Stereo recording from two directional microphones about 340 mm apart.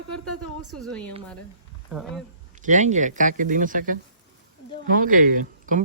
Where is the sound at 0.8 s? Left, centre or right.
Centre.